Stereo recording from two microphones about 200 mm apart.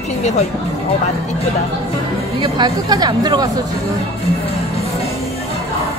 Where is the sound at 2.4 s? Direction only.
20° right (ahead or behind).